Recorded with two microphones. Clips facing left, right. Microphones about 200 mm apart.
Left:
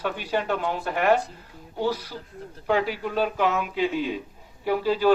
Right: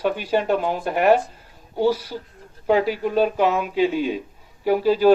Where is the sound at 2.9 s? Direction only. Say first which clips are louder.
Right 6 dB; 15° right (ahead or behind).